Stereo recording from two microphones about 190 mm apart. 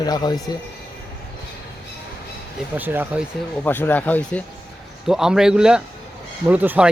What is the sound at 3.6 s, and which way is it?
Speech, 10° left (ahead or behind).